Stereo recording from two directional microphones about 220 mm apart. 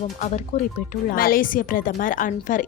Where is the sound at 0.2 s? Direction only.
35° left (ahead or behind).